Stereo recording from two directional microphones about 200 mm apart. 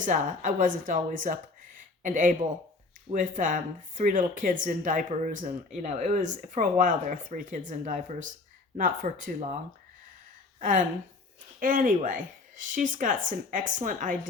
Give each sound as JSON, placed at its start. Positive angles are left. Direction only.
{"t": 0.0, "sound": "speech", "side_deg": -40}
{"t": 10.6, "sound": "speech", "side_deg": -40}